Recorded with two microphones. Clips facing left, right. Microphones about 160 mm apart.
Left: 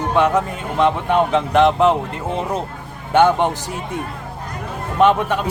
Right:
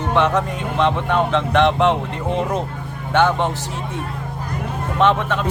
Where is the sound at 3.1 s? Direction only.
15° left (ahead or behind).